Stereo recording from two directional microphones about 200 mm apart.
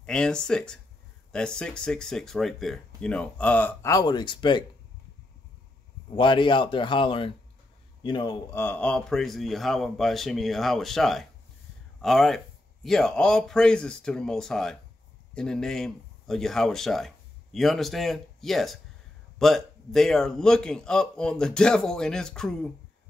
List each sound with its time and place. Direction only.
0.0 s speech: 5° left (ahead or behind); by 4.6 s 25° left (ahead or behind)
6.1 s speech: 25° left (ahead or behind); by 22.7 s 5° left (ahead or behind)